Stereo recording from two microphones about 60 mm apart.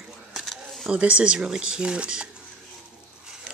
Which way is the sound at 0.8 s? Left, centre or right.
Centre.